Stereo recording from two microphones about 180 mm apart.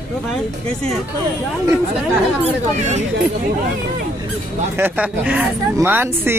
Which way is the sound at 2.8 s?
40° right (ahead or behind).